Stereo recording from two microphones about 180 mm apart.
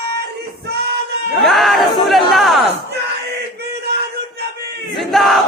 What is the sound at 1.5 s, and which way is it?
Chatter, centre (ahead or behind).